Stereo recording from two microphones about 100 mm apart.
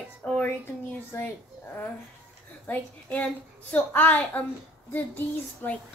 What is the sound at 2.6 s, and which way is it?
A woman's voice, 15° left (ahead or behind).